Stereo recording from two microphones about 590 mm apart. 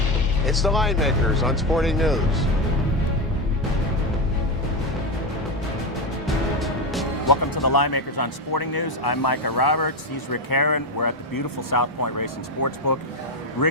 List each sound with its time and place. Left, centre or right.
0.4 s speech: centre
6.2 s music: centre
7.3 s speech: left